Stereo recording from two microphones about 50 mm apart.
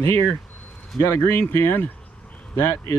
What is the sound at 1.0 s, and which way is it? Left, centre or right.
Speech, left.